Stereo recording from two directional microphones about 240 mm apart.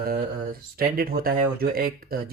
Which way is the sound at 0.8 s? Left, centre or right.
Right.